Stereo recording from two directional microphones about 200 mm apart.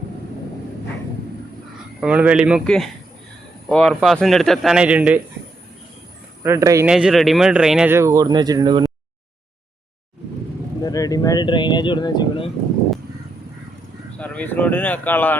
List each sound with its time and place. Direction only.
2.0 s a man's voice: 5° right (ahead or behind)
6.4 s speech: 15° right (ahead or behind)
6.8 s speech: 5° right (ahead or behind); by 8.9 s 20° right (ahead or behind)
10.8 s speech: 20° left (ahead or behind)
14.2 s speech: 10° left (ahead or behind)